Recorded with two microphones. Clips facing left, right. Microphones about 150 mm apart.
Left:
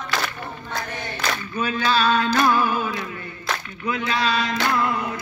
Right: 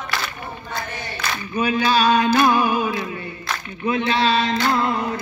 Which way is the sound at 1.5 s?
15° right (ahead or behind).